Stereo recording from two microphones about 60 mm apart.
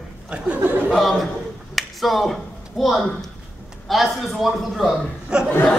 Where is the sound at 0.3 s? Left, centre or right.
Right.